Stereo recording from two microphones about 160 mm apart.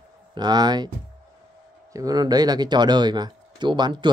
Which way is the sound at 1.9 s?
20° right (ahead or behind).